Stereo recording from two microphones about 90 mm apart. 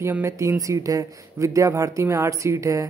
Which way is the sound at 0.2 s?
35° right (ahead or behind).